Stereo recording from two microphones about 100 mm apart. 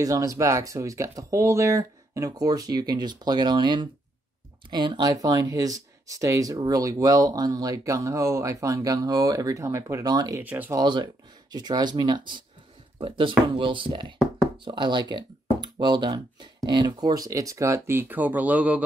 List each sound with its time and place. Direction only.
0.0 s speech: 35° right (ahead or behind)
10.4 s speech: 15° right (ahead or behind)
10.7 s speech: 45° right (ahead or behind); by 18.9 s 15° right (ahead or behind)